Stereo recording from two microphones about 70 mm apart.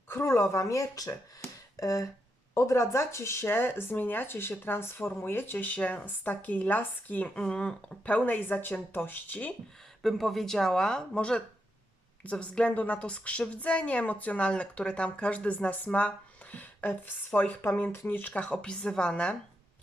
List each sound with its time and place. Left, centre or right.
0.1 s speech: left
7.3 s a woman's voice: centre
10.0 s a woman's voice: centre